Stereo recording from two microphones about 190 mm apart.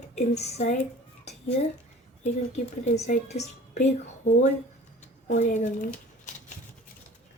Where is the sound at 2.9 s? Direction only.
35° left (ahead or behind).